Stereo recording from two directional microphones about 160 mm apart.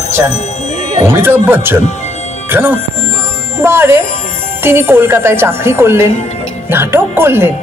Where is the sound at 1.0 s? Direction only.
15° right (ahead or behind).